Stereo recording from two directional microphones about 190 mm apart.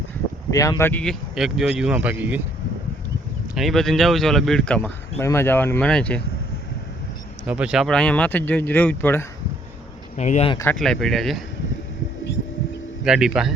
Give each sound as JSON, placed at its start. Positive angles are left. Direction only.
{"t": 0.5, "sound": "speech", "side_deg": 20}
{"t": 1.4, "sound": "speech", "side_deg": 0}
{"t": 3.5, "sound": "speech", "side_deg": 0}
{"t": 7.4, "sound": "speech", "side_deg": -5}
{"t": 10.2, "sound": "speech", "side_deg": 35}
{"t": 10.7, "sound": "speech", "side_deg": 5}
{"t": 13.1, "sound": "speech", "side_deg": -5}